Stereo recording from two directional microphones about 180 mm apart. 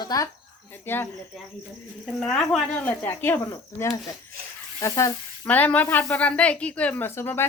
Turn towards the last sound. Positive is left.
turn(degrees=15)  # may be behind; listen again after turning